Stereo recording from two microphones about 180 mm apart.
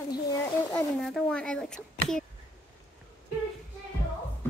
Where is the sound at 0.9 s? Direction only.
Centre (ahead or behind).